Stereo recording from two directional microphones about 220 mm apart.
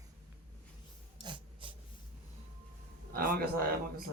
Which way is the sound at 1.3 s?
20° right (ahead or behind).